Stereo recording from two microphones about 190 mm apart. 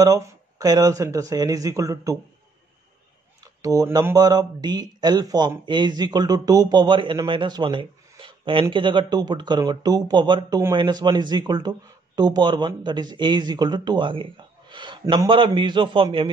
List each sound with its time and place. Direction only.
0.0 s speech: 20° right (ahead or behind)
3.6 s speech: 20° right (ahead or behind)